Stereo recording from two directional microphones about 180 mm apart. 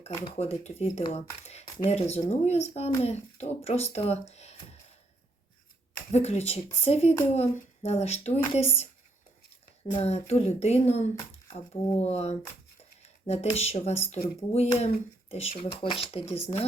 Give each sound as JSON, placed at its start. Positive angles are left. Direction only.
{"t": 0.3, "sound": "speech", "side_deg": 35}
{"t": 6.1, "sound": "speech", "side_deg": 35}
{"t": 9.9, "sound": "speech", "side_deg": 35}